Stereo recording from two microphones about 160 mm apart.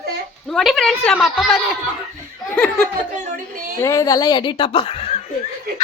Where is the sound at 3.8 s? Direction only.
20° left (ahead or behind); by 5.2 s 40° left (ahead or behind).